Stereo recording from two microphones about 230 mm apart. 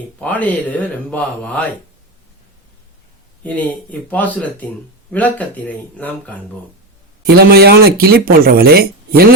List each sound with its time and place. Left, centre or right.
0.2 s speech: centre
3.4 s speech: centre
7.3 s speech: right